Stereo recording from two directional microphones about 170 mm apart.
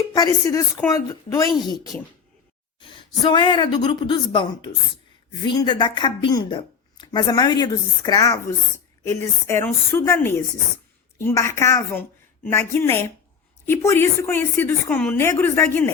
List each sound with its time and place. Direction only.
0.1 s speech: 20° left (ahead or behind)
3.2 s a woman's voice: 25° left (ahead or behind)